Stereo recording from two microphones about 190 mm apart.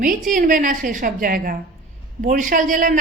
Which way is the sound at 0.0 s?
45° right (ahead or behind).